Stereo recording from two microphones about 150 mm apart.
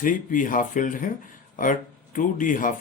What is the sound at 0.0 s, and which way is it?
Speech, 65° left (ahead or behind).